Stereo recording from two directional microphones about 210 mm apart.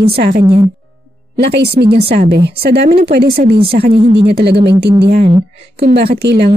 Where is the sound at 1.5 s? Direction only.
50° right (ahead or behind).